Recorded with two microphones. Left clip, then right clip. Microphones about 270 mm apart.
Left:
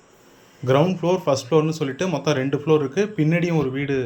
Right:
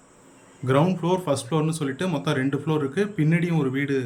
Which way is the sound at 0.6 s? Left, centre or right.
Centre.